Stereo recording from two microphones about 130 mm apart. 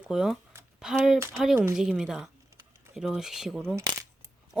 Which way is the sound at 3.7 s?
30° right (ahead or behind).